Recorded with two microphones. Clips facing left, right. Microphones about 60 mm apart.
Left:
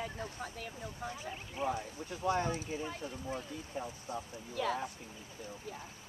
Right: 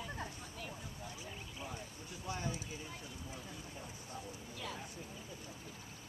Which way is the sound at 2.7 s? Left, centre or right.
Left.